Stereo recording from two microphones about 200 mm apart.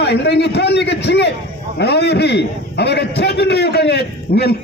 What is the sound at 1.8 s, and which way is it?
A man's voice, 55° left (ahead or behind).